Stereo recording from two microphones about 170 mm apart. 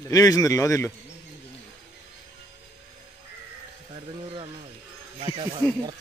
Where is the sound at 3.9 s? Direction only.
30° right (ahead or behind).